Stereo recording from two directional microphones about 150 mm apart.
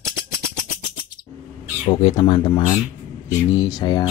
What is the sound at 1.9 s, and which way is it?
Speech, 35° left (ahead or behind).